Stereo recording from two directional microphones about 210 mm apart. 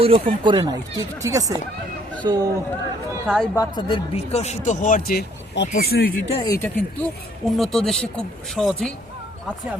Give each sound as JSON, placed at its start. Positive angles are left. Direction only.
{"t": 0.0, "sound": "speech", "side_deg": -25}
{"t": 3.5, "sound": "speech", "side_deg": 20}
{"t": 6.2, "sound": "speech", "side_deg": 25}
{"t": 6.5, "sound": "speech", "side_deg": 10}